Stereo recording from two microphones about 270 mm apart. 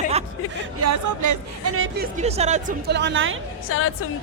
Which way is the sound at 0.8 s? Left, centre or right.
Right.